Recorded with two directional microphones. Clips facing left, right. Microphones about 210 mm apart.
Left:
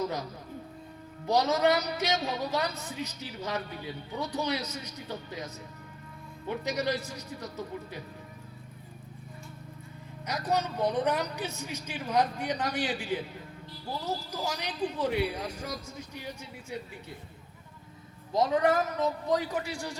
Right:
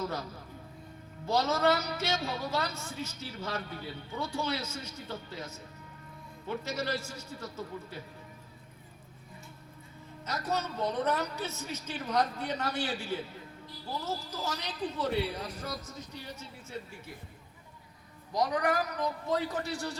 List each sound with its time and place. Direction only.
1.3 s a woman's voice: 15° left (ahead or behind)
6.5 s a woman's voice: 15° left (ahead or behind)
10.2 s a woman's voice: 15° left (ahead or behind)
14.4 s a woman's voice: 15° left (ahead or behind)
18.3 s a man's voice: 25° left (ahead or behind)